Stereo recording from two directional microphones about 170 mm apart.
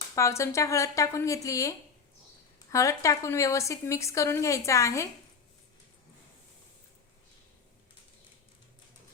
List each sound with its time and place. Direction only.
0.2 s speech: 15° left (ahead or behind)